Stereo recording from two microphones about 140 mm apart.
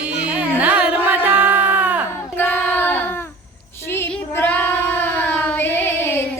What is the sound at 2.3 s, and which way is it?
Child singing, 10° left (ahead or behind).